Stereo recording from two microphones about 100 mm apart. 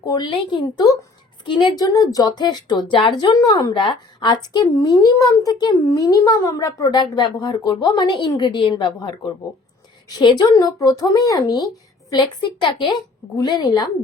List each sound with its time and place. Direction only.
0.0 s speech: 40° left (ahead or behind)
0.3 s speech: 50° left (ahead or behind)
1.7 s speech: 40° left (ahead or behind)
3.3 s speech: 40° left (ahead or behind)